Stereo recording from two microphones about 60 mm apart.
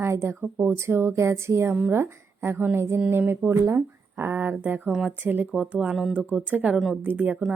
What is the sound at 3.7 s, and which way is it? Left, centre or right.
Speech, right.